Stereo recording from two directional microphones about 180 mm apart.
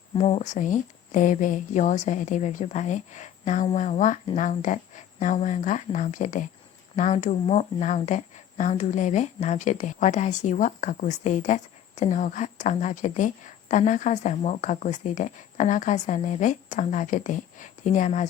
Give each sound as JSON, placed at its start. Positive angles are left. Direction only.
{"t": 0.1, "sound": "a woman's voice", "side_deg": 35}